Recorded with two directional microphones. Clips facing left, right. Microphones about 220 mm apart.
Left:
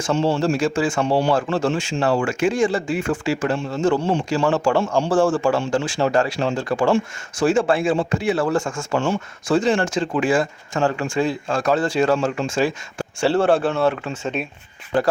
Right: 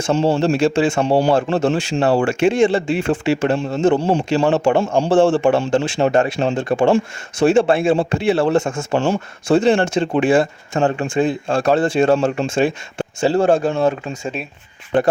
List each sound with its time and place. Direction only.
0.0 s a man's voice: 35° right (ahead or behind)
9.0 s speech: 35° right (ahead or behind)
13.3 s a man's voice: 40° right (ahead or behind)
13.6 s speech: 15° right (ahead or behind)